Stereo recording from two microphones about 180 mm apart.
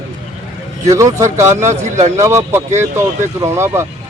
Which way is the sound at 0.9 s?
15° right (ahead or behind).